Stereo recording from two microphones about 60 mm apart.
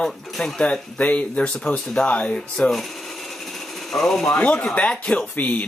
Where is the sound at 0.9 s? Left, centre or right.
Left.